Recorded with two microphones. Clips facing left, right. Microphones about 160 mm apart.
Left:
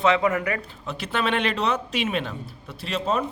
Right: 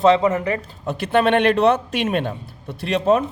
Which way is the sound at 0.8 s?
50° right (ahead or behind).